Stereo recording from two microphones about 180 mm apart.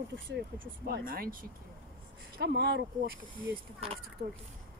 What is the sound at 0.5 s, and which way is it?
Speech, 55° right (ahead or behind).